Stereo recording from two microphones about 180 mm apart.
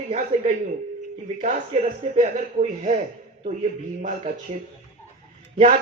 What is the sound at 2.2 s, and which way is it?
Speech, 40° right (ahead or behind).